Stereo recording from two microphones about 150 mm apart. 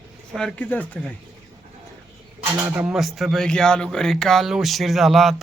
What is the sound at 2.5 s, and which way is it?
Speech, 15° right (ahead or behind).